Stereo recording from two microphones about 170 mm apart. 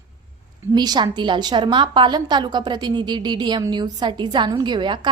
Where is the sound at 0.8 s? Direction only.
25° right (ahead or behind).